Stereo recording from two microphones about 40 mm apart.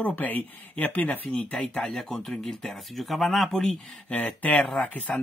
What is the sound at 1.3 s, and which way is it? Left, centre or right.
Speech, left.